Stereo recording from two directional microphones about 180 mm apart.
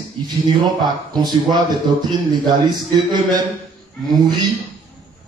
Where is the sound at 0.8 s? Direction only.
25° right (ahead or behind).